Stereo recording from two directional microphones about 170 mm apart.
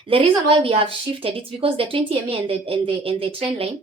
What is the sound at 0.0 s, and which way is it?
Speech, 30° right (ahead or behind).